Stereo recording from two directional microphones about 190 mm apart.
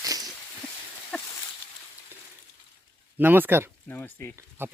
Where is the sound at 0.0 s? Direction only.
20° right (ahead or behind).